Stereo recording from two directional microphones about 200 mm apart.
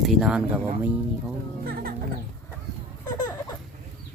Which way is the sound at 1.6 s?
50° right (ahead or behind).